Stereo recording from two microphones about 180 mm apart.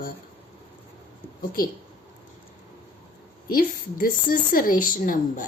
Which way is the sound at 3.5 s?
50° left (ahead or behind).